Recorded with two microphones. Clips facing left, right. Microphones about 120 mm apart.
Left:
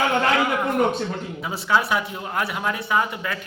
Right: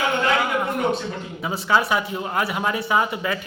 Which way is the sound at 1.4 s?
Centre (ahead or behind).